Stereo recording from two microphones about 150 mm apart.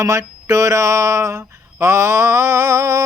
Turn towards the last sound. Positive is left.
turn(degrees=-20)  # may be behind; listen again after turning